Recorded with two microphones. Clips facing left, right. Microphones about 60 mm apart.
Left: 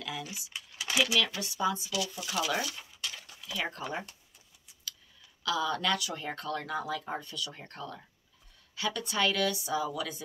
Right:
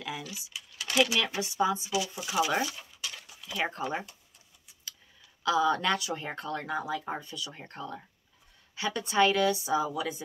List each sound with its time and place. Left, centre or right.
0.7 s typing: centre
1.1 s speech: right
3.0 s a sound: centre
3.4 s speech: right
5.4 s speech: right